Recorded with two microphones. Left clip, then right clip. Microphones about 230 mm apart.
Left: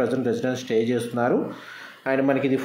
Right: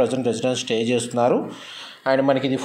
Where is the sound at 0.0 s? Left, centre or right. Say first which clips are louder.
Right 3 dB; centre.